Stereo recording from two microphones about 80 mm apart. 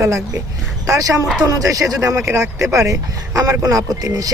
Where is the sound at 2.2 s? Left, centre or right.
Right.